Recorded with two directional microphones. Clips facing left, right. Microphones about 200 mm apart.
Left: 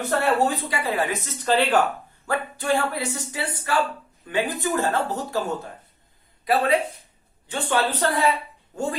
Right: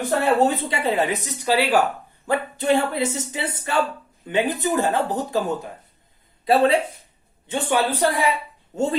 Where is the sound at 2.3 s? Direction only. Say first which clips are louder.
Right 4 dB; 20° right (ahead or behind).